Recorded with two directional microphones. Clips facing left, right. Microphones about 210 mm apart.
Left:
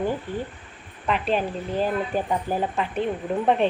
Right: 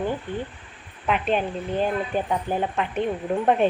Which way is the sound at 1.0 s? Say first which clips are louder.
Right 1 dB; centre (ahead or behind).